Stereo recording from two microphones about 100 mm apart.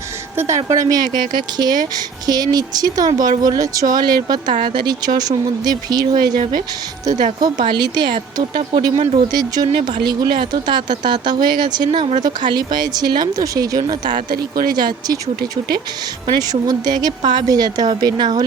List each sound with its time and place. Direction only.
0.3 s speech: 30° right (ahead or behind); by 11.9 s 45° right (ahead or behind)
11.9 s speech: 65° right (ahead or behind)
12.2 s speech: 45° right (ahead or behind)